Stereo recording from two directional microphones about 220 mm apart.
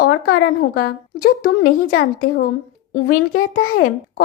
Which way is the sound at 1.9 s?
60° left (ahead or behind).